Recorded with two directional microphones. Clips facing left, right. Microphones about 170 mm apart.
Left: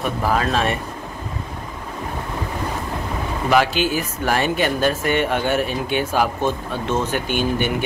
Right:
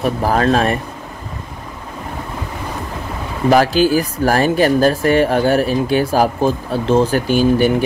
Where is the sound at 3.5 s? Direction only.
40° right (ahead or behind).